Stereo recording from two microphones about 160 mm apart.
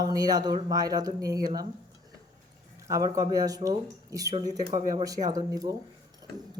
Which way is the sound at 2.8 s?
20° right (ahead or behind).